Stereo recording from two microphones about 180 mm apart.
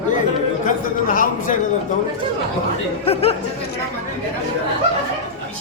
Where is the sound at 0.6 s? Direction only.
50° left (ahead or behind).